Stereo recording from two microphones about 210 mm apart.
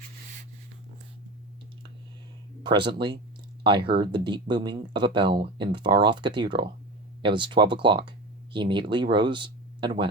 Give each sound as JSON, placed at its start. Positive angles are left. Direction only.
{"t": 2.6, "sound": "speech", "side_deg": -20}